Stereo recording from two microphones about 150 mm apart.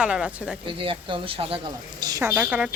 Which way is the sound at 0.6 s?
35° right (ahead or behind).